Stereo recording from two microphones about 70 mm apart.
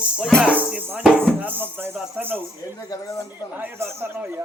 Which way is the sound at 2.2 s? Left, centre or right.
Right.